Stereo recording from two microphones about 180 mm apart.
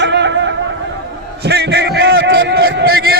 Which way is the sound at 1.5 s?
70° right (ahead or behind).